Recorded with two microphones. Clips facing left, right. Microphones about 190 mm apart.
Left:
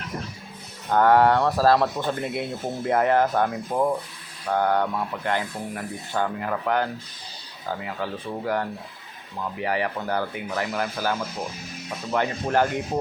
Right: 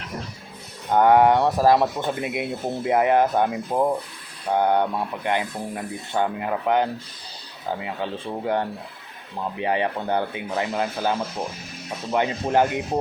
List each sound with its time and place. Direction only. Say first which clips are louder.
0.9 s speech: right 2 dB; 15° right (ahead or behind)